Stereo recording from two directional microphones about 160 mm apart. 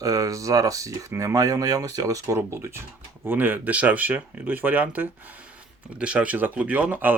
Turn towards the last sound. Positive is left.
turn(degrees=-10)  # may be behind; listen again after turning